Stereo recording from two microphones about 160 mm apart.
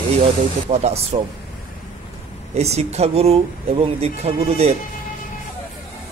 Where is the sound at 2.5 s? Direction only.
40° right (ahead or behind).